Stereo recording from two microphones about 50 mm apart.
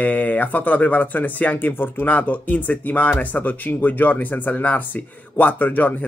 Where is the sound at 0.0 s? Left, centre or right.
Left.